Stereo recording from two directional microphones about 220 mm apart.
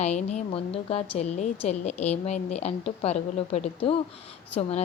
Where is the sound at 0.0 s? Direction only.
30° left (ahead or behind).